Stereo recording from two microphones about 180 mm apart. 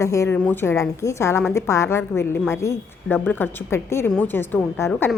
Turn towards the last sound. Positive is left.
turn(degrees=10)  # may be behind; listen again after turning